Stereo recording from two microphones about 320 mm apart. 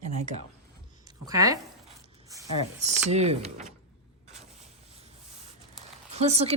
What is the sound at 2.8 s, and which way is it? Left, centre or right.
Speech, centre.